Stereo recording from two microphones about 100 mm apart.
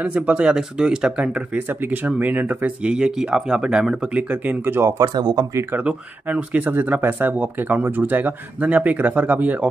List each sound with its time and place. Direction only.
0.0 s speech: 15° right (ahead or behind)
5.0 s speech: 45° right (ahead or behind)
5.9 s speech: 10° right (ahead or behind)